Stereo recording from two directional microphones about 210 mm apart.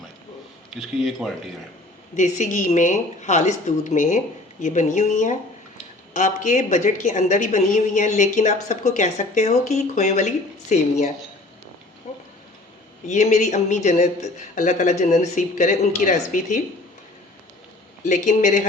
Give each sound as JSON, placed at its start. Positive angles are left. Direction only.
{"t": 0.8, "sound": "speech", "side_deg": 0}
{"t": 2.1, "sound": "a woman's voice", "side_deg": 35}
{"t": 13.1, "sound": "a woman's voice", "side_deg": 35}
{"t": 18.1, "sound": "a woman's voice", "side_deg": 35}